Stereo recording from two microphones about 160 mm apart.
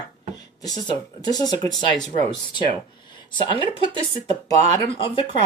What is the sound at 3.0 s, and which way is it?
Speech, 30° left (ahead or behind).